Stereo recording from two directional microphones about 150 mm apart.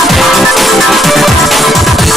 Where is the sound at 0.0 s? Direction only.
Centre (ahead or behind).